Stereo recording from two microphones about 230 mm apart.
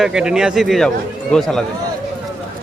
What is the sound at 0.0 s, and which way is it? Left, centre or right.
Speech, centre.